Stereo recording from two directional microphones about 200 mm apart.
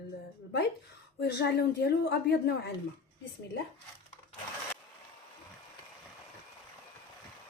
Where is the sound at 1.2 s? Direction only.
55° left (ahead or behind).